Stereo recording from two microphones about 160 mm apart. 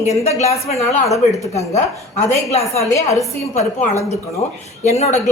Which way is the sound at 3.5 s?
50° left (ahead or behind).